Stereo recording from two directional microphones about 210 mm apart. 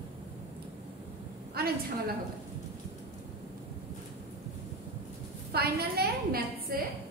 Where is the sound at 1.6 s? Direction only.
50° right (ahead or behind).